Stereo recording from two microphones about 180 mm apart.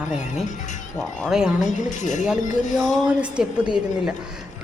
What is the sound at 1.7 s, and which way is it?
Speech, 45° left (ahead or behind).